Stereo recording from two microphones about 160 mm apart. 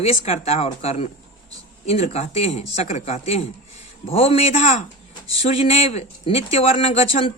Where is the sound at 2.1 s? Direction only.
40° left (ahead or behind).